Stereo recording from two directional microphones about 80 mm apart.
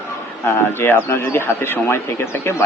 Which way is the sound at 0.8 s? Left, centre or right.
Left.